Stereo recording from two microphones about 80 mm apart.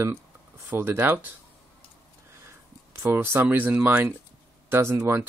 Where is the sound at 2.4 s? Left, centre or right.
Right.